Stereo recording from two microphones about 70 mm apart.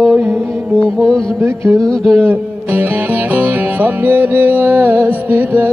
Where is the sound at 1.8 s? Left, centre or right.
Centre.